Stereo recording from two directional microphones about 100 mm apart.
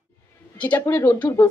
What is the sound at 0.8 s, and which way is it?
Speech, 20° left (ahead or behind).